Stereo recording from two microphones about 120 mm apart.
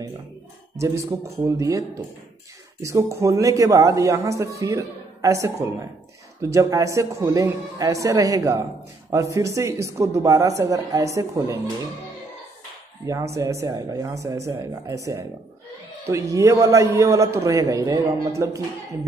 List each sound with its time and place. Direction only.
0.7 s speech: 25° right (ahead or behind)
13.0 s speech: 25° right (ahead or behind)